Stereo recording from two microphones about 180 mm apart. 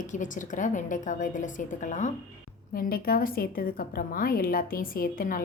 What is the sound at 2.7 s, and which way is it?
A woman's voice, 55° left (ahead or behind).